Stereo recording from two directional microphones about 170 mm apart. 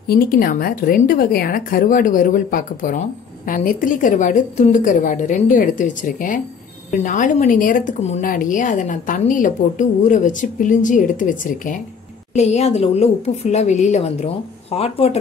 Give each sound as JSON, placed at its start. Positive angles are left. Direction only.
{"t": 0.1, "sound": "a woman's voice", "side_deg": 60}
{"t": 12.4, "sound": "a woman's voice", "side_deg": 40}